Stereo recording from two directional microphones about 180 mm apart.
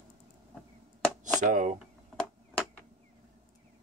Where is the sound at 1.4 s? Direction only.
45° right (ahead or behind).